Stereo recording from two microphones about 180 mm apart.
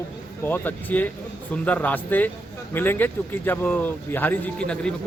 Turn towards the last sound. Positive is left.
turn(degrees=5)  # may be behind; listen again after turning